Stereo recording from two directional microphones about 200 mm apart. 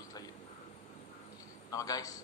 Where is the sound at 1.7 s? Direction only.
15° left (ahead or behind).